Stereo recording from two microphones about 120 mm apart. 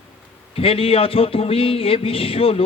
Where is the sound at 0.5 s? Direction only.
50° left (ahead or behind).